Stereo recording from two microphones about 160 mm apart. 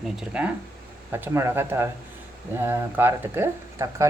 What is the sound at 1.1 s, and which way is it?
Speech, 15° right (ahead or behind).